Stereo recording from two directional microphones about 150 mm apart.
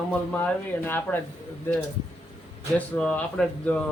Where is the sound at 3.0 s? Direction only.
5° left (ahead or behind).